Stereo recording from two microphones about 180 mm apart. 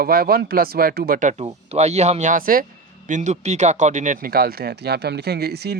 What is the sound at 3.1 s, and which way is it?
Speech, 40° right (ahead or behind).